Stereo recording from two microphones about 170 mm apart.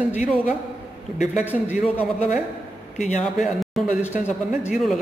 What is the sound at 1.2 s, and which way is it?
Speech, 45° left (ahead or behind).